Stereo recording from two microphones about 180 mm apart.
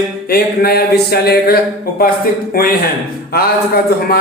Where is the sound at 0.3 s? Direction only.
60° left (ahead or behind).